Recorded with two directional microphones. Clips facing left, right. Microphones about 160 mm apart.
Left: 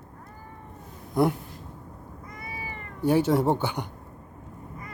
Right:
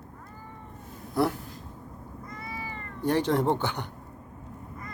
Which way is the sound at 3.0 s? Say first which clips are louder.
Left 3 dB; 10° left (ahead or behind).